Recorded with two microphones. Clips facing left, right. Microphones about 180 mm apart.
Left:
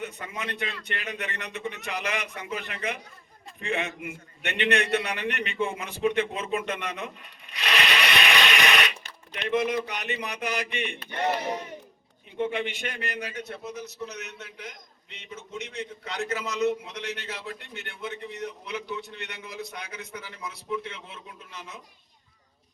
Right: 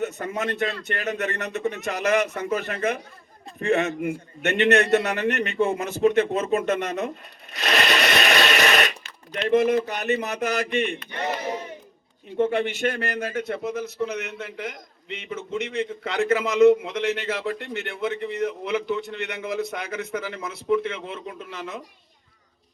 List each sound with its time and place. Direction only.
0.0 s a man's voice: 40° right (ahead or behind)
12.4 s a man's voice: 45° right (ahead or behind)
13.3 s a man's voice: 90° right